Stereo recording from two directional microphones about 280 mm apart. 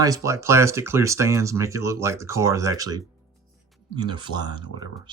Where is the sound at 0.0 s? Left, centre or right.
Centre.